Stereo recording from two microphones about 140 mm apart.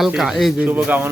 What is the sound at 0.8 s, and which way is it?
Speech, 10° right (ahead or behind).